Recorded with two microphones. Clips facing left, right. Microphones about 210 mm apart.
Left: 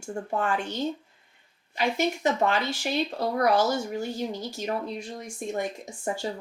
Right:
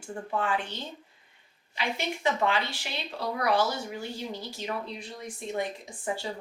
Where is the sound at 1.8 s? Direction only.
45° left (ahead or behind).